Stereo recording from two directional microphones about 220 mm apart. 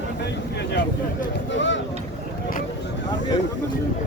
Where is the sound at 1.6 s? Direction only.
55° left (ahead or behind).